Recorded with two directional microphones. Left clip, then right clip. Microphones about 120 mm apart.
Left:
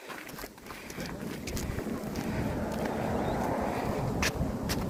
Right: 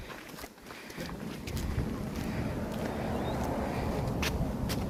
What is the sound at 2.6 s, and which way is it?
Vehicle, 15° left (ahead or behind).